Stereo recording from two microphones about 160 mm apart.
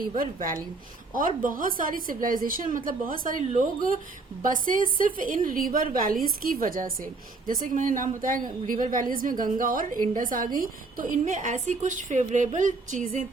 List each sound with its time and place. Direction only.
0.0 s a woman's voice: 60° right (ahead or behind)